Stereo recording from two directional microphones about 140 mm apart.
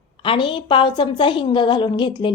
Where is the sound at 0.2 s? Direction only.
35° left (ahead or behind).